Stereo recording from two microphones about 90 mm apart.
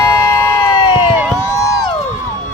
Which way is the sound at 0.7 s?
50° left (ahead or behind).